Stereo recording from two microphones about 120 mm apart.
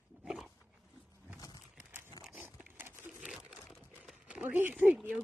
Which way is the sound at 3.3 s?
5° right (ahead or behind).